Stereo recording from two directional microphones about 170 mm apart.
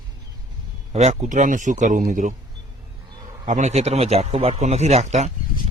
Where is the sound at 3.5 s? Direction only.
45° right (ahead or behind).